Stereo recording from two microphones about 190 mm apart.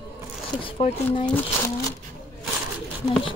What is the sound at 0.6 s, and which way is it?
Speech, 30° left (ahead or behind).